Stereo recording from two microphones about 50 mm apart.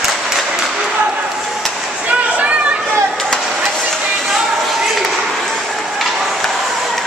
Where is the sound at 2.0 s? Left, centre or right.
Right.